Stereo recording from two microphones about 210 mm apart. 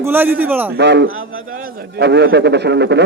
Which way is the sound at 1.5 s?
45° right (ahead or behind).